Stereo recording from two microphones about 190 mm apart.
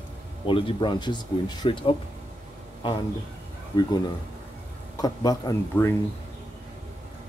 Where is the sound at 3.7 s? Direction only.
20° left (ahead or behind).